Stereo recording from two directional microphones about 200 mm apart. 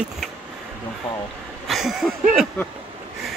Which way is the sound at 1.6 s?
Centre (ahead or behind).